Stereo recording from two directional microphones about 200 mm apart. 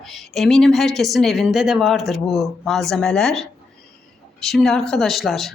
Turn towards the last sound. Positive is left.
turn(degrees=0)  # may be behind; listen again after turning